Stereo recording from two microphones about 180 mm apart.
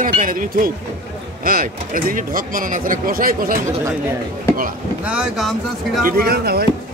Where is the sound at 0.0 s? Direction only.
50° right (ahead or behind).